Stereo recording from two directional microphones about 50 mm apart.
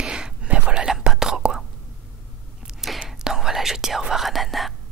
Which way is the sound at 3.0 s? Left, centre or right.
Centre.